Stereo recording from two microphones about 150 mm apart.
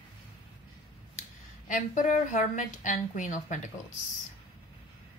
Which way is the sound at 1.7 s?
60° left (ahead or behind).